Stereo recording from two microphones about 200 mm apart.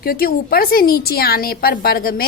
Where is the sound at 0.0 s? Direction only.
45° left (ahead or behind).